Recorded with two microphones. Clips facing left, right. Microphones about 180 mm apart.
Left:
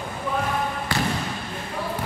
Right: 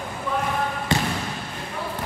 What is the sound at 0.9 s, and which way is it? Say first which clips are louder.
Trickle: right 3 dB; 20° right (ahead or behind).